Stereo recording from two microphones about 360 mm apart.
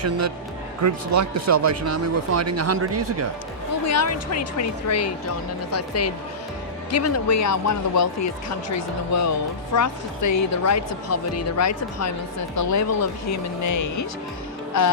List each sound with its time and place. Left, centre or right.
0.8 s speech: right
3.8 s speech: left